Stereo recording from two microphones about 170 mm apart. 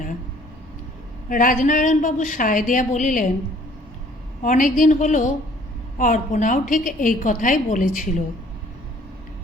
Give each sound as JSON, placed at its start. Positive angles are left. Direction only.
{"t": 1.3, "sound": "a woman's voice", "side_deg": 55}
{"t": 4.4, "sound": "a woman's voice", "side_deg": 50}